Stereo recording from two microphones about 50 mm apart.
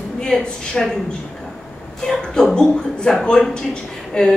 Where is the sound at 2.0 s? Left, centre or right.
Centre.